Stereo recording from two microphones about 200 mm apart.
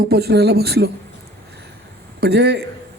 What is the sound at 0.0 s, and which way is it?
Speech, 55° right (ahead or behind).